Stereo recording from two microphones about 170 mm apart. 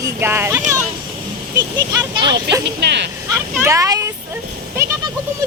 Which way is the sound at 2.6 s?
80° right.